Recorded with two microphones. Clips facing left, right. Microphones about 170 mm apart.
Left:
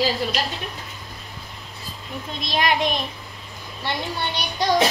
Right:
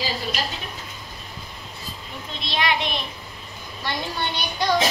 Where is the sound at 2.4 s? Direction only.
45° left (ahead or behind).